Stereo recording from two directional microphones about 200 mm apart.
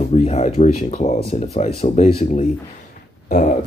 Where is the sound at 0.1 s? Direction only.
30° left (ahead or behind).